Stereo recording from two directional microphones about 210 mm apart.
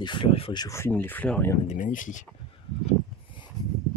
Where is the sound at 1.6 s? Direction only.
35° left (ahead or behind).